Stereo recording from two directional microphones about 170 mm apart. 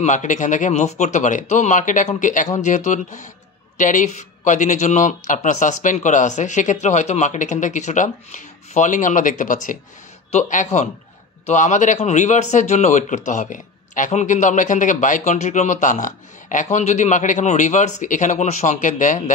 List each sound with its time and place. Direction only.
0.0 s speech: 45° left (ahead or behind)